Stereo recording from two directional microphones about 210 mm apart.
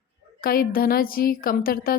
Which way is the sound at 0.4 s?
45° left (ahead or behind).